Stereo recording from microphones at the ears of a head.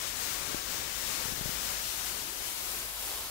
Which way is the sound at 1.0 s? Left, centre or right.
Left.